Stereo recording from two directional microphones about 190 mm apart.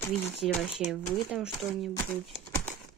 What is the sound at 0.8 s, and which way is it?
Speech, 35° left (ahead or behind).